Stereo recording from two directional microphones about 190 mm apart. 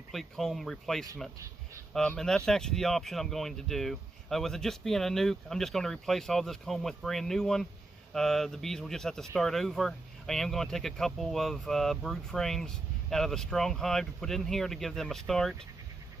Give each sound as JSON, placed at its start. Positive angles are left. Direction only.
{"t": 0.1, "sound": "speech", "side_deg": 0}